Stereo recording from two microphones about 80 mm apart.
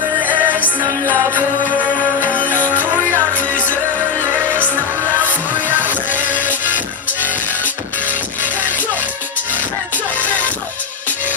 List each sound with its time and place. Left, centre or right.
0.3 s music: right
1.0 s music: left
2.7 s music: right
5.2 s music: right
10.2 s music: centre